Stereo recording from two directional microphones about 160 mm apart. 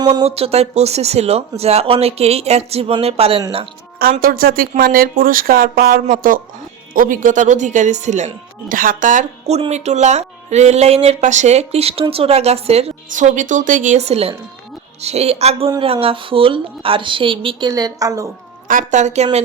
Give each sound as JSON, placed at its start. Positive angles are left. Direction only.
{"t": 0.0, "sound": "speech", "side_deg": -25}
{"t": 0.3, "sound": "speech", "side_deg": -40}
{"t": 4.2, "sound": "speech", "side_deg": -65}
{"t": 8.7, "sound": "speech", "side_deg": -60}
{"t": 9.6, "sound": "speech", "side_deg": -45}
{"t": 17.7, "sound": "a woman's voice", "side_deg": -20}
{"t": 18.7, "sound": "speech", "side_deg": -50}